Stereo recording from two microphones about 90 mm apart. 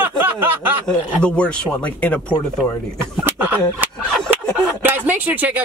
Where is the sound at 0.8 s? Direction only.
10° left (ahead or behind).